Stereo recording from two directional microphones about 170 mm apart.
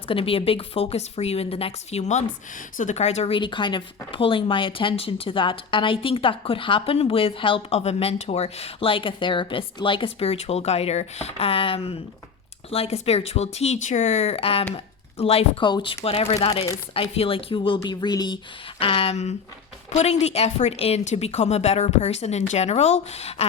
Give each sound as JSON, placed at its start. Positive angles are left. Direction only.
{"t": 0.1, "sound": "speech", "side_deg": 35}